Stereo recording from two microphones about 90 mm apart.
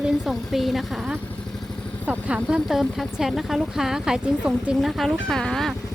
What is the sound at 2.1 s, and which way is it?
Speech, 15° right (ahead or behind).